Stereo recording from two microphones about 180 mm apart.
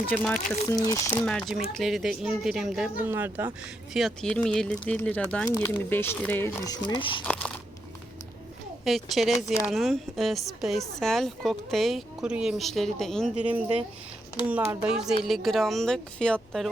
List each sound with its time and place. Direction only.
0.1 s speech: 5° left (ahead or behind)
0.7 s speech: 20° left (ahead or behind)
1.1 s speech: 5° left (ahead or behind); by 3.5 s 10° right (ahead or behind)
3.9 s speech: centre (ahead or behind)
5.5 s speech: 20° left (ahead or behind)
8.8 s speech: centre (ahead or behind)